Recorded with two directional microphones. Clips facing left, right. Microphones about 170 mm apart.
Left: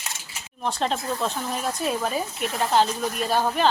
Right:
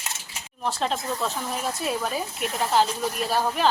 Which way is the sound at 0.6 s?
Centre (ahead or behind).